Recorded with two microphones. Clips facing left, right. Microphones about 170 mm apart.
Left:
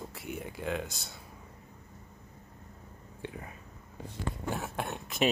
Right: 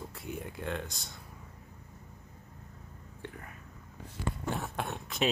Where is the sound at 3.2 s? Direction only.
15° left (ahead or behind).